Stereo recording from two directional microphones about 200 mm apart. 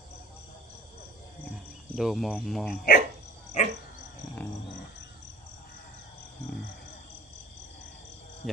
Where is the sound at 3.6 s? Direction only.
35° left (ahead or behind).